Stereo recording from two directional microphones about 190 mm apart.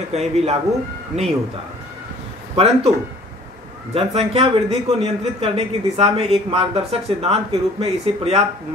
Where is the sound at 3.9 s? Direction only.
30° right (ahead or behind).